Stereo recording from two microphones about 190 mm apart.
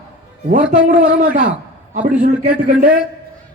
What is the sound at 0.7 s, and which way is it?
A man's voice, 45° right (ahead or behind).